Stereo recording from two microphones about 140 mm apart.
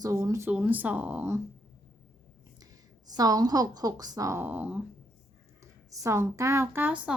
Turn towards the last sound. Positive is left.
turn(degrees=-10)  # may be behind; listen again after turning